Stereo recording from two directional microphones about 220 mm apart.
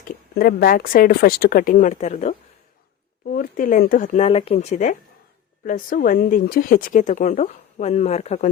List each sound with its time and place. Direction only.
0.0 s a woman's voice: 45° left (ahead or behind)